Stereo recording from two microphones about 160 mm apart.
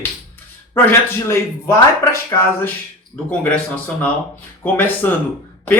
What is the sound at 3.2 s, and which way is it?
Speech, 5° left (ahead or behind).